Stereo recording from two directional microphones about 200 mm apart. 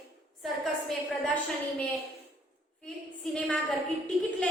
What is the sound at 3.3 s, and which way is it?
Speech, 5° left (ahead or behind).